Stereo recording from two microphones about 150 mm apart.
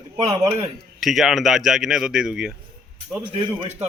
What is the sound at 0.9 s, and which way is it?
Speech, centre (ahead or behind).